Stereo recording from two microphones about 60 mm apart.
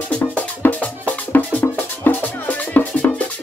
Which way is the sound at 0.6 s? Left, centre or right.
Left.